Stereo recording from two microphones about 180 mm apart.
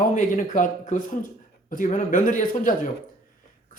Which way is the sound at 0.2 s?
45° left (ahead or behind).